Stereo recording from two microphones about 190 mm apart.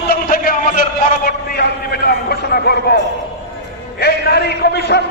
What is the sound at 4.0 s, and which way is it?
A man's voice, 60° left (ahead or behind).